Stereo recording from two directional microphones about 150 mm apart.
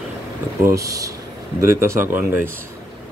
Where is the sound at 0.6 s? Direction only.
20° right (ahead or behind).